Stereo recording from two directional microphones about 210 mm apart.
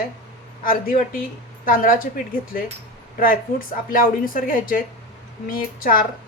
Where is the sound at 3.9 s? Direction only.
40° left (ahead or behind).